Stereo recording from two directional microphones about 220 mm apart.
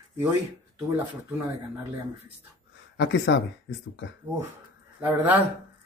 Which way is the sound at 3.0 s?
55° left (ahead or behind).